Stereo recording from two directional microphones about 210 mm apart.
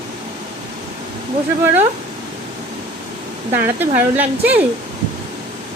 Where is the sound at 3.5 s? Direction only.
10° right (ahead or behind).